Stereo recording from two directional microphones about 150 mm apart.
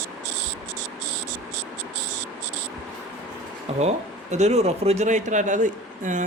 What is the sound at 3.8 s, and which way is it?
Speech, 50° right (ahead or behind).